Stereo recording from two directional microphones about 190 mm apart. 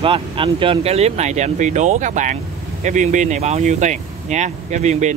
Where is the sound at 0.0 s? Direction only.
25° right (ahead or behind).